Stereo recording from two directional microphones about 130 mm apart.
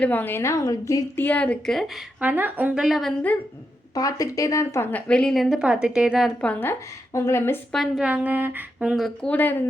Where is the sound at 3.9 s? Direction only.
25° left (ahead or behind).